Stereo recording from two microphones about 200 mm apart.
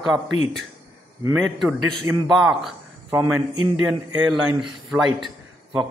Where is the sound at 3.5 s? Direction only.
30° left (ahead or behind).